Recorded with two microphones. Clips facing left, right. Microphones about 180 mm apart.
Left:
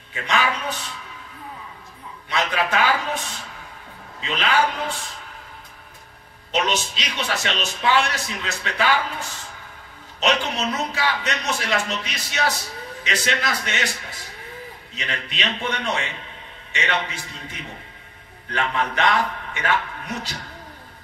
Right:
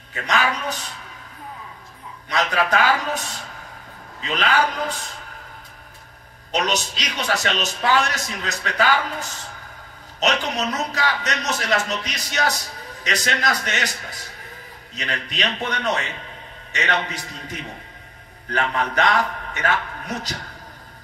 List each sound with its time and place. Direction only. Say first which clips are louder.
0.1 s a man's voice: right 1 dB; 40° right (ahead or behind)
2.2 s a man's voice: right 2 dB; 40° right (ahead or behind)
6.5 s a man's voice: even; 40° right (ahead or behind)
10.2 s a man's voice: even; 40° right (ahead or behind)
15.0 s a man's voice: right 3 dB; 40° right (ahead or behind)